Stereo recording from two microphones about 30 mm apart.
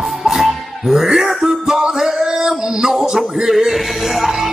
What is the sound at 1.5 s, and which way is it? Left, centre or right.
Music, centre.